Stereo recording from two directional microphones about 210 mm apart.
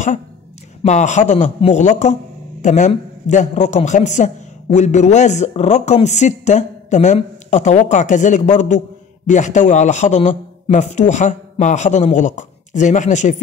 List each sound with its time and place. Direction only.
0.8 s a man's voice: 35° left (ahead or behind)